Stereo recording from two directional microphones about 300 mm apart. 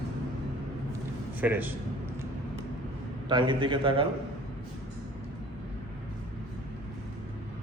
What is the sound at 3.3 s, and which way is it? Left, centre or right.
Speech, centre.